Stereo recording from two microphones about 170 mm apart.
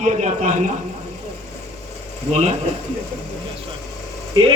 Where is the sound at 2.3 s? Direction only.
40° right (ahead or behind).